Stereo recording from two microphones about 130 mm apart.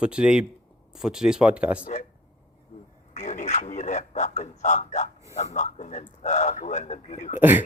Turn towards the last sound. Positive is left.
turn(degrees=70)  # may be behind; listen again after turning